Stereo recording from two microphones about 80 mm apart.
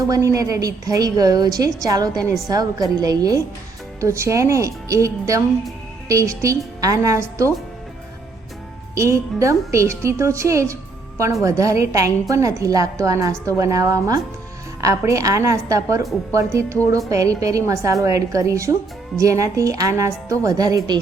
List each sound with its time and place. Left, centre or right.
0.0 s a woman's voice: right
4.0 s a woman's voice: right
9.0 s a woman's voice: right